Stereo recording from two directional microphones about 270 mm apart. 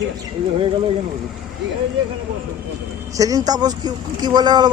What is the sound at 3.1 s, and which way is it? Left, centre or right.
Speech, centre.